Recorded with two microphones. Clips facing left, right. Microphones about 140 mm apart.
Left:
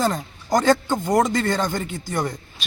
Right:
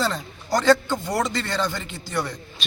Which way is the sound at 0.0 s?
45° left (ahead or behind).